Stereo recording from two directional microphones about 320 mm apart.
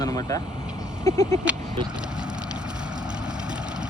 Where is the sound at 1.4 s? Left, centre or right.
Centre.